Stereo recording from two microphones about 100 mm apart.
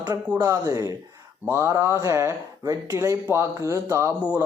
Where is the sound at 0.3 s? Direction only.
30° right (ahead or behind).